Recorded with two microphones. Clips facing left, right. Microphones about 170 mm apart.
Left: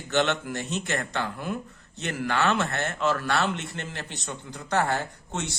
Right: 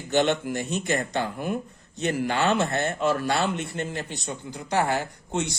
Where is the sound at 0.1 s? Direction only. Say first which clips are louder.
Right 3 dB; 15° right (ahead or behind).